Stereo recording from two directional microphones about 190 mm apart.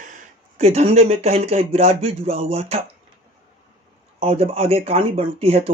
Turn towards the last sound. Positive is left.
turn(degrees=-30)  # may be behind; listen again after turning